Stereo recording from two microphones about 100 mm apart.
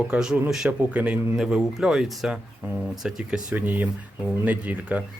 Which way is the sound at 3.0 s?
5° right (ahead or behind).